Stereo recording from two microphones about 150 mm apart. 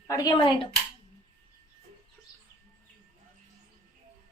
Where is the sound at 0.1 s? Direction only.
25° left (ahead or behind).